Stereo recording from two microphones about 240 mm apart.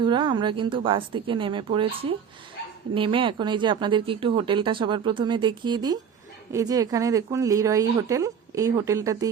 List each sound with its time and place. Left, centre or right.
0.0 s speech: centre